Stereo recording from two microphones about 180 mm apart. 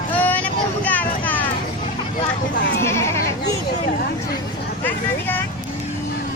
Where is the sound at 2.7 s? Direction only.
15° left (ahead or behind).